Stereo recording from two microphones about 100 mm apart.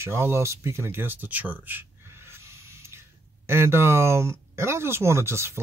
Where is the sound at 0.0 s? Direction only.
25° right (ahead or behind).